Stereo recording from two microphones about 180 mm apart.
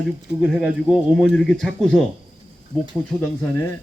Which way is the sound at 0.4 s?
5° right (ahead or behind).